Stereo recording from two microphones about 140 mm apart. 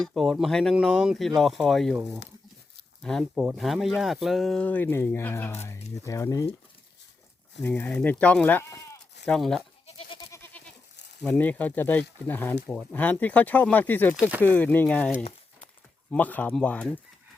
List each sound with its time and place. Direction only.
0.0 s speech: centre (ahead or behind)
3.0 s speech: 5° left (ahead or behind); by 6.5 s 20° left (ahead or behind)
7.6 s speech: 10° left (ahead or behind)
9.8 s goat: 40° left (ahead or behind)
10.3 s goat: 15° left (ahead or behind)
11.3 s speech: 15° left (ahead or behind)
14.2 s speech: 10° right (ahead or behind)
14.4 s speech: 15° left (ahead or behind)
16.1 s speech: 10° left (ahead or behind)